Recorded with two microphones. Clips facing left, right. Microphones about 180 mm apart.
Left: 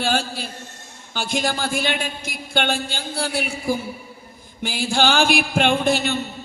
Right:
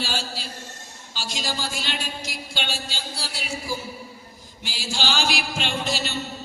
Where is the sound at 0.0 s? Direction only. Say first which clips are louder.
Left 7 dB; 55° left (ahead or behind).